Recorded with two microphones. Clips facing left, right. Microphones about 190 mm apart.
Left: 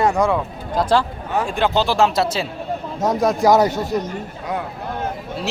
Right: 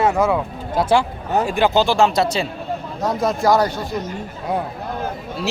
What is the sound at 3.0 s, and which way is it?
Speech, 15° left (ahead or behind).